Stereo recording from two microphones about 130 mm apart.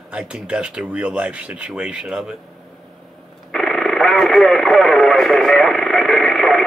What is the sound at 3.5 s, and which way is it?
Radio, 5° left (ahead or behind).